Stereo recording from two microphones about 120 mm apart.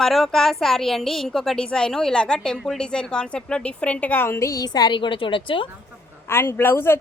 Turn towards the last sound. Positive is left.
turn(degrees=20)  # may be behind; listen again after turning